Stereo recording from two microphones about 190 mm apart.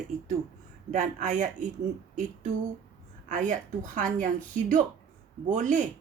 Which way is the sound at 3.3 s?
40° right (ahead or behind).